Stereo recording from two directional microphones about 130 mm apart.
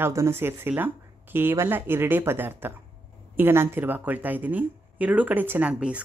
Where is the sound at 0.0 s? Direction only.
20° right (ahead or behind).